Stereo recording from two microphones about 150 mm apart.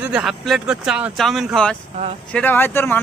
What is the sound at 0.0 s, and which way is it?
Speech, 5° right (ahead or behind).